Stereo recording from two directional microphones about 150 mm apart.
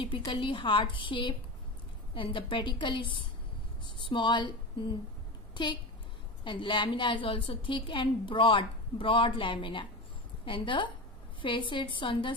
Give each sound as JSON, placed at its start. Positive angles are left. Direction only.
{"t": 0.0, "sound": "a woman's voice", "side_deg": 35}
{"t": 5.5, "sound": "a sound", "side_deg": 30}
{"t": 6.4, "sound": "a woman's voice", "side_deg": 35}